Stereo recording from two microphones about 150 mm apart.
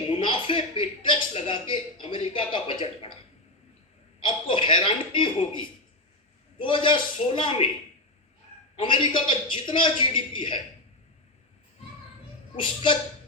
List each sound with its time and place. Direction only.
0.1 s a man's voice: 35° left (ahead or behind)
4.2 s a man's voice: 35° left (ahead or behind)
8.7 s a man's voice: 35° left (ahead or behind)
12.6 s a man's voice: 30° left (ahead or behind)